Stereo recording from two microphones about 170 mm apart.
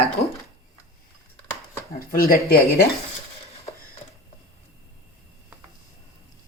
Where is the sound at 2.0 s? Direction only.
60° left (ahead or behind).